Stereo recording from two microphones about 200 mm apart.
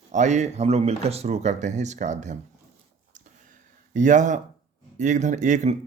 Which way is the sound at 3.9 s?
40° right (ahead or behind).